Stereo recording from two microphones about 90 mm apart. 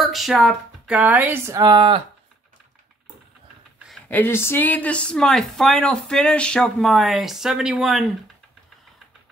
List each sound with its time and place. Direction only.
0.0 s a sound: centre (ahead or behind)
0.9 s a woman's voice: 15° right (ahead or behind)
1.5 s speech: 45° right (ahead or behind)
1.8 s speech: 70° right (ahead or behind)
4.1 s speech: 25° left (ahead or behind); by 8.1 s 5° right (ahead or behind)